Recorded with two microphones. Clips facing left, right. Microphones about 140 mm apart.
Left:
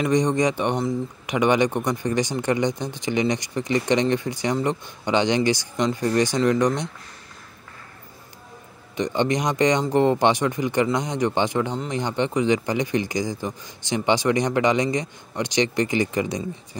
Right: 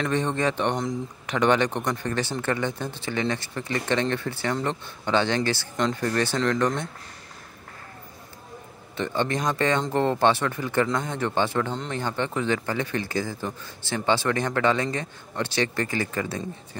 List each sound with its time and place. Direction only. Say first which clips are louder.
0.0 s speech: left 5 dB; 15° left (ahead or behind)
8.9 s speech: left 4 dB; 15° left (ahead or behind)